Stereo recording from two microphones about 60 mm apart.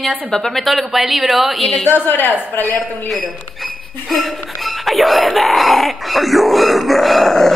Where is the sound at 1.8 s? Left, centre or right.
Left.